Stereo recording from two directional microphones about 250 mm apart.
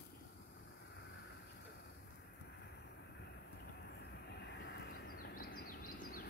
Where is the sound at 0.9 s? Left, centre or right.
Left.